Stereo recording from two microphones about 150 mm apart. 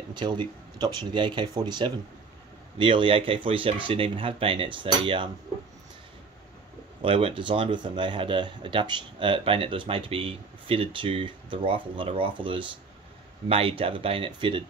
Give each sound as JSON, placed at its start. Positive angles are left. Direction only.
{"t": 0.1, "sound": "speech", "side_deg": -30}
{"t": 7.0, "sound": "speech", "side_deg": -40}